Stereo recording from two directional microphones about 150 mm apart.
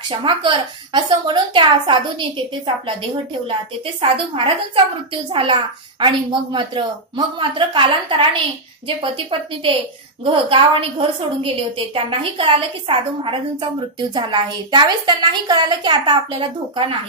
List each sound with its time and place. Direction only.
0.1 s a woman's voice: 35° right (ahead or behind)